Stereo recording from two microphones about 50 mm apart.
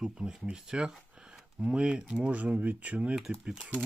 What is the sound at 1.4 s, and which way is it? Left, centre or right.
Speech, centre.